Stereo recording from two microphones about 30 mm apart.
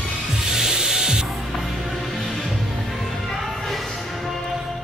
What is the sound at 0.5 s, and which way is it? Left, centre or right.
Rub, centre.